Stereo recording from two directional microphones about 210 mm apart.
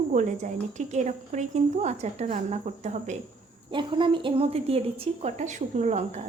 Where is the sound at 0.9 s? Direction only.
35° right (ahead or behind).